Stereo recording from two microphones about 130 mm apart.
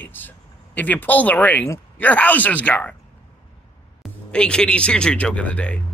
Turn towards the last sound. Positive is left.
turn(degrees=10)  # may be behind; listen again after turning